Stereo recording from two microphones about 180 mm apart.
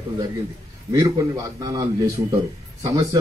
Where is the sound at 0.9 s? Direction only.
20° right (ahead or behind).